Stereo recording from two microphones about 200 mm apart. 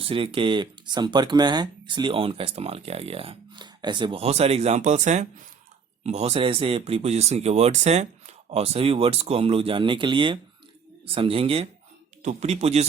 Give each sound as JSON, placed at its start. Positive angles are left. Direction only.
{"t": 0.0, "sound": "speech", "side_deg": -25}